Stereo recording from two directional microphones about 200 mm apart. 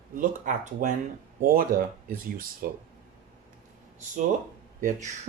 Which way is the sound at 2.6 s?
45° right (ahead or behind).